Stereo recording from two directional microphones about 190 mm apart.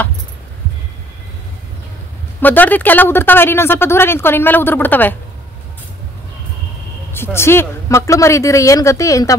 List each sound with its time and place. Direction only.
2.4 s speech: 10° left (ahead or behind)
7.1 s speech: 10° left (ahead or behind)